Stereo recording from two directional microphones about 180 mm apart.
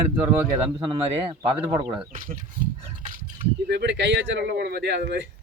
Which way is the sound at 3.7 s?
70° right (ahead or behind).